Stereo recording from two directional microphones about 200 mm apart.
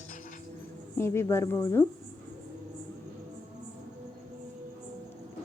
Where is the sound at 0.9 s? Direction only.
15° left (ahead or behind).